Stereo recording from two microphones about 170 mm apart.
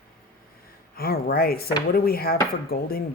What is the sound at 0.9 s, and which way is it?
Speech, 65° left (ahead or behind).